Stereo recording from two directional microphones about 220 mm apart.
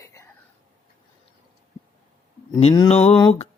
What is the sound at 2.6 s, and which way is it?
Speech, 20° left (ahead or behind).